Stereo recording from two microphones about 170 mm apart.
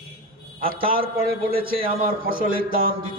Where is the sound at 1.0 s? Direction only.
60° right (ahead or behind).